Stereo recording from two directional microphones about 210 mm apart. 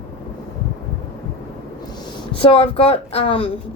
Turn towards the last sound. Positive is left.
turn(degrees=25)  # may be behind; listen again after turning